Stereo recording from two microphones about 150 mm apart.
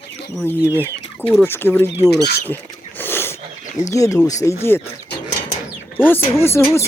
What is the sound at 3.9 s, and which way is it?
Speech, 20° left (ahead or behind).